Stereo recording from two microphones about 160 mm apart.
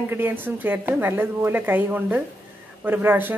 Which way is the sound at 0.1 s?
15° right (ahead or behind).